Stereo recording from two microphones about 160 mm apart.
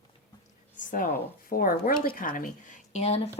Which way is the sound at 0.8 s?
55° left (ahead or behind).